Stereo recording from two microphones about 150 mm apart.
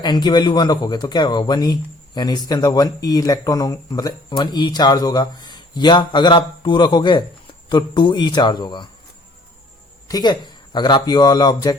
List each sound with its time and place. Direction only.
0.0 s speech: 30° left (ahead or behind)
10.1 s speech: 25° left (ahead or behind)